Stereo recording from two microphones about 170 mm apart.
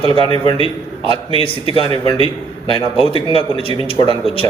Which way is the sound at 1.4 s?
30° left (ahead or behind).